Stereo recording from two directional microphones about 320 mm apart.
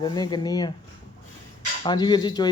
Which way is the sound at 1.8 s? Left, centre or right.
Centre.